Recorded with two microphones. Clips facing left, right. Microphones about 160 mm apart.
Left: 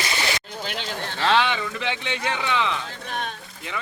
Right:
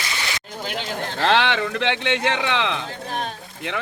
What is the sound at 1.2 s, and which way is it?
Speech, 70° right (ahead or behind).